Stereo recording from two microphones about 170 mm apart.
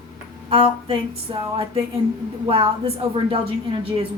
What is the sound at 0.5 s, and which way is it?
A woman's voice, 30° right (ahead or behind).